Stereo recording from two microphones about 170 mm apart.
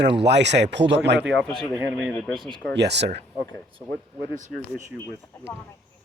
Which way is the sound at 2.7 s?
90° right.